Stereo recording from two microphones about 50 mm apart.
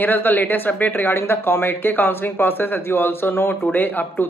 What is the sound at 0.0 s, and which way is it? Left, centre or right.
Speech, left.